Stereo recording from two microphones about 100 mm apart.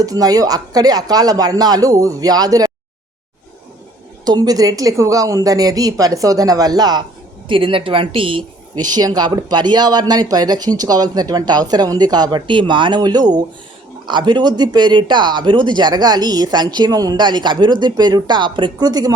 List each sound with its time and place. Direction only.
0.0 s speech: 35° right (ahead or behind)
4.3 s speech: 40° right (ahead or behind)
7.4 s speech: 60° right (ahead or behind); by 19.1 s 40° right (ahead or behind)